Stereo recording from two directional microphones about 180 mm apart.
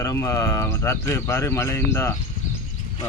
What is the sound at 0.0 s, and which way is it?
Speech, 15° left (ahead or behind).